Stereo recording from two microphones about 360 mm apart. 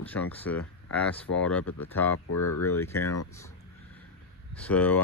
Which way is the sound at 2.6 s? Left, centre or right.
Centre.